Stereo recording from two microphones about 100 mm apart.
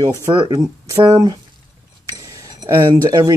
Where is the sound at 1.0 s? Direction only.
45° right (ahead or behind).